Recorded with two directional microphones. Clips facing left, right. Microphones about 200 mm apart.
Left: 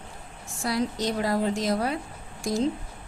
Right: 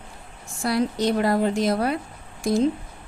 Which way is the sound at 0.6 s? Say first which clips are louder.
Right 4 dB; 60° right (ahead or behind).